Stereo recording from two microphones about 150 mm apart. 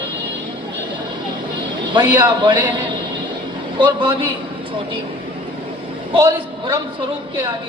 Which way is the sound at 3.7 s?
35° right (ahead or behind).